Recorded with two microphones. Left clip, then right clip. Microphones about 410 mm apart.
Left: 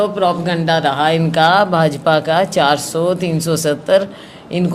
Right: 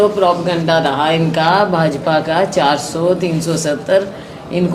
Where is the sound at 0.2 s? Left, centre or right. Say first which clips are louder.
Right 2 dB; left.